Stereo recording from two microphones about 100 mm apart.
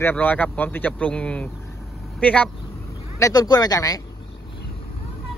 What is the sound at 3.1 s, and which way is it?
Speech, 35° left (ahead or behind).